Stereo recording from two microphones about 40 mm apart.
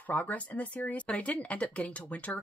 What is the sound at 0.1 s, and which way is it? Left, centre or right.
Speech, left.